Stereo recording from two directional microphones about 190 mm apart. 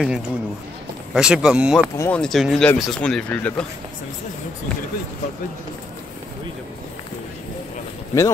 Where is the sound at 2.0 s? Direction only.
5° left (ahead or behind).